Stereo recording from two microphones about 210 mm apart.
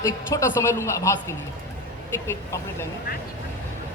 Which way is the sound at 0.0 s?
15° left (ahead or behind).